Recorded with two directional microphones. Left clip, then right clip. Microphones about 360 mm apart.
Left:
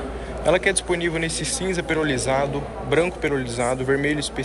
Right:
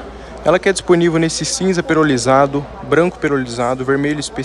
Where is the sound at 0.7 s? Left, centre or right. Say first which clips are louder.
Right 10 dB; centre.